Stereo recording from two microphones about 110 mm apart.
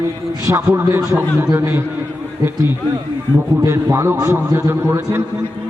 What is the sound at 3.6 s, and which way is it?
A man's voice, 25° right (ahead or behind).